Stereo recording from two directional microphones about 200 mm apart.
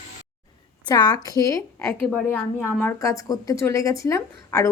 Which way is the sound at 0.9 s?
20° left (ahead or behind).